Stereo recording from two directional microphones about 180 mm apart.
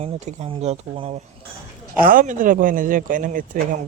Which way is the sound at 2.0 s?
50° right (ahead or behind).